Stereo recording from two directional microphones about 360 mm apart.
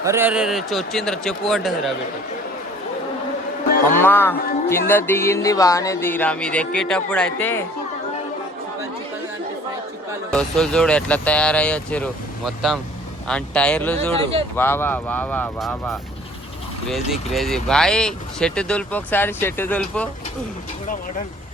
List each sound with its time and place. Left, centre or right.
0.0 s speech: centre
3.9 s speech: centre
10.3 s speech: centre
13.9 s speech: centre
14.5 s speech: centre